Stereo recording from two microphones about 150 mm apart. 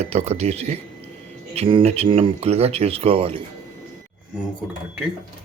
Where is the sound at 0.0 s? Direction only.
45° right (ahead or behind).